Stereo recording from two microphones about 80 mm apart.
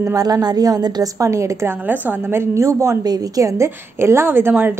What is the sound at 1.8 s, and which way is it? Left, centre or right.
A woman's voice, right.